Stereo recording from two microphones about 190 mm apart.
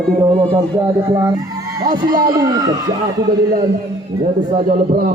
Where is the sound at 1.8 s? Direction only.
45° right (ahead or behind).